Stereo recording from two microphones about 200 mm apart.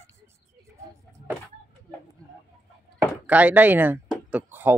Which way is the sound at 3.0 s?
10° right (ahead or behind).